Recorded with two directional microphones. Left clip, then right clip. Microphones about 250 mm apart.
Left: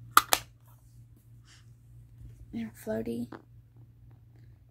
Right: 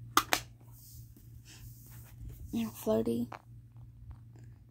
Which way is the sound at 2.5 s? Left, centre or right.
Centre.